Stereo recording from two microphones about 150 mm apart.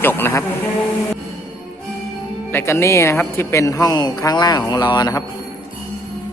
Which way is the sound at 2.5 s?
15° left (ahead or behind).